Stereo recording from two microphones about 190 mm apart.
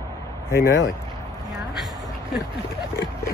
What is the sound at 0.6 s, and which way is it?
Speech, 55° left (ahead or behind).